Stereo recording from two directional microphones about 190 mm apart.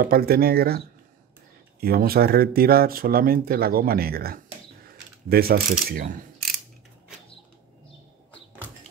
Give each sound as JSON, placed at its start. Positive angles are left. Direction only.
{"t": 0.0, "sound": "speech", "side_deg": -50}